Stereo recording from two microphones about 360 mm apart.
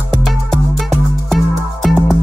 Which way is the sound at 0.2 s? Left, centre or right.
Centre.